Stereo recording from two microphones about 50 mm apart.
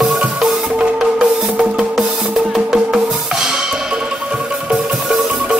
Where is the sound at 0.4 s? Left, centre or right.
Centre.